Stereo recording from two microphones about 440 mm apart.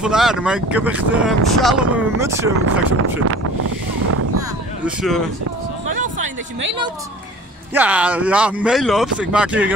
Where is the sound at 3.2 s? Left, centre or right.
Right.